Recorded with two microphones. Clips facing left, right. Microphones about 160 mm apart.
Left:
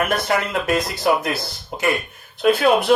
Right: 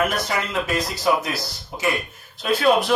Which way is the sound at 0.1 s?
55° left (ahead or behind).